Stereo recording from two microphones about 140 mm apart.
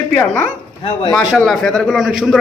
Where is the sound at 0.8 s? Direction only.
45° left (ahead or behind).